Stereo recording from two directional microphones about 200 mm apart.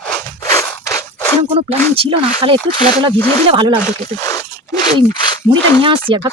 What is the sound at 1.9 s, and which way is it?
Speech, 30° right (ahead or behind).